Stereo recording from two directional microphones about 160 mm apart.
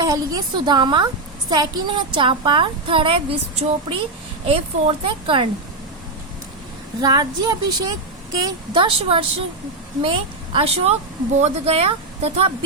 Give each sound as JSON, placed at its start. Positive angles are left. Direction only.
{"t": 0.0, "sound": "a woman's voice", "side_deg": -25}
{"t": 7.0, "sound": "a woman's voice", "side_deg": -25}